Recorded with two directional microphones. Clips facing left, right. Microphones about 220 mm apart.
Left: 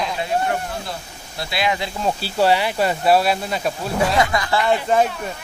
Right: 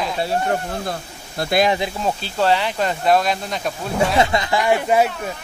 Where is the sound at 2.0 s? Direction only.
10° left (ahead or behind).